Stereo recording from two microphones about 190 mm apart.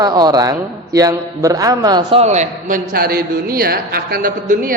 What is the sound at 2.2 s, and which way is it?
Speech, 35° right (ahead or behind).